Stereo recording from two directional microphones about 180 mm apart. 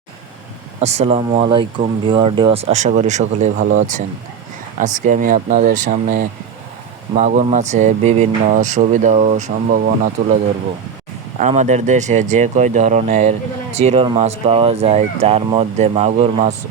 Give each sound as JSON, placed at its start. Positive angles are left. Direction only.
{"t": 0.8, "sound": "speech", "side_deg": -35}
{"t": 11.3, "sound": "speech", "side_deg": -40}